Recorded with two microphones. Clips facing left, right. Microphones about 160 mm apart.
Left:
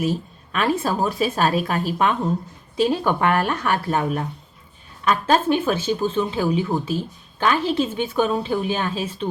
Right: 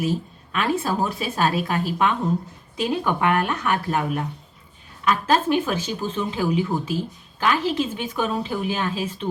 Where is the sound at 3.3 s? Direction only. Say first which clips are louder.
Left 1 dB; 35° left (ahead or behind).